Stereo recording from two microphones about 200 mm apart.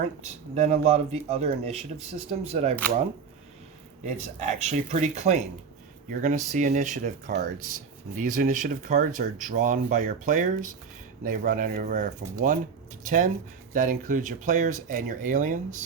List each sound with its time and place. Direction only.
0.5 s speech: 35° right (ahead or behind)
4.0 s speech: 35° right (ahead or behind)